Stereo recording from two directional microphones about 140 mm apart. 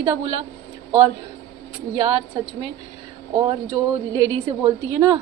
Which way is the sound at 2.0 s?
35° right (ahead or behind).